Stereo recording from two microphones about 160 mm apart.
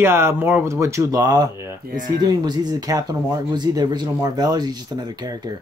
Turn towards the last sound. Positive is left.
turn(degrees=-25)  # may be behind; listen again after turning